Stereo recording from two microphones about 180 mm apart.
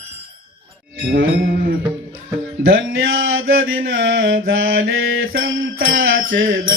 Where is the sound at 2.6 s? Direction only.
90° right.